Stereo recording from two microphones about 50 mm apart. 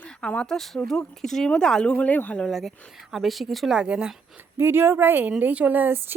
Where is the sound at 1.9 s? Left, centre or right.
Left.